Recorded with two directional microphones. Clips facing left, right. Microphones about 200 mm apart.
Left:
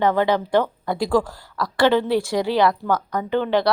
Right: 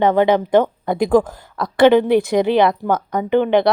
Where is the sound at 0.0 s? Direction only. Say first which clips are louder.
Right 5 dB; 20° right (ahead or behind).